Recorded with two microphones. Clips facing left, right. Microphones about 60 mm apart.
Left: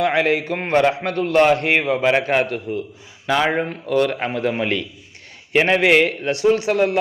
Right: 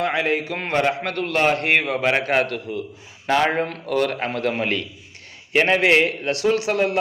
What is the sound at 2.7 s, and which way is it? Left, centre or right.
Speech, left.